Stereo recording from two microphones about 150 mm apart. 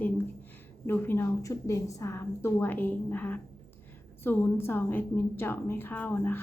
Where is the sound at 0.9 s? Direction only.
15° left (ahead or behind).